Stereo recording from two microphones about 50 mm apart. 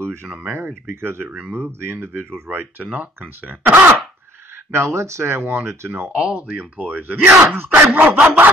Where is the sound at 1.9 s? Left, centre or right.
Right.